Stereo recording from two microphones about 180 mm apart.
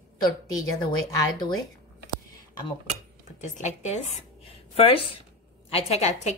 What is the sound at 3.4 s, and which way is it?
A woman's voice, 40° left (ahead or behind).